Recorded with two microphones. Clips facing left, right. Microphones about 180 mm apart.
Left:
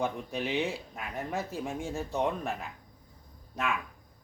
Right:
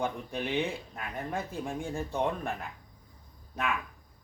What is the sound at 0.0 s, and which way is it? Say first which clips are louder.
Speech: left 1 dB; 5° left (ahead or behind).